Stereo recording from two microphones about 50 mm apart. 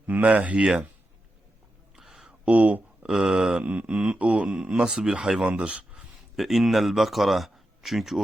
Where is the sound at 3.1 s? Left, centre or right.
Centre.